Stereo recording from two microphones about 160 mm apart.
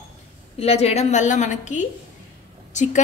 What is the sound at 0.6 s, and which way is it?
A woman's voice, 40° left (ahead or behind).